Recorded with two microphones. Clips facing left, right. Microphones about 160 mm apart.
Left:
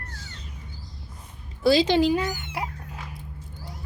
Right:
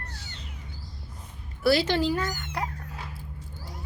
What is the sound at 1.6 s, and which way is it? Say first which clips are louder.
Dog: left 4 dB; 15° left (ahead or behind).